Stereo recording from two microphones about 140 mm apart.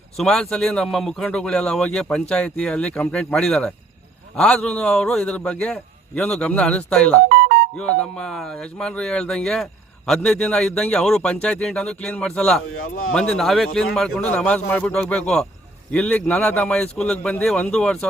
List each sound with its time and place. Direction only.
0.2 s a man's voice: 5° left (ahead or behind)
7.3 s music: 90° right
7.8 s a man's voice: 10° left (ahead or behind)